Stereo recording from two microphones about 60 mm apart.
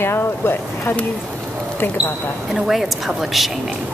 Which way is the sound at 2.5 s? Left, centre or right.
Centre.